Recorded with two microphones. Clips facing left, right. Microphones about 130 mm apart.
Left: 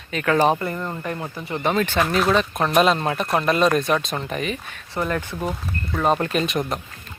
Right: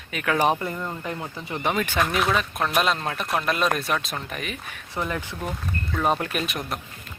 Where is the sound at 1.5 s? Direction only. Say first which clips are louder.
Left 4 dB; 15° right (ahead or behind).